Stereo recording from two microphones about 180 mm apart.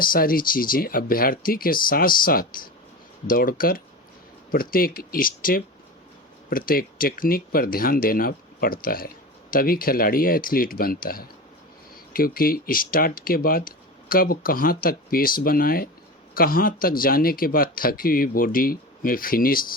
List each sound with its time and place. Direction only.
0.0 s speech: 50° left (ahead or behind)